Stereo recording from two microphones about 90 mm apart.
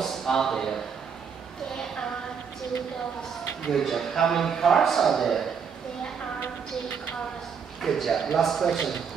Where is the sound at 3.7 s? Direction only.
5° left (ahead or behind).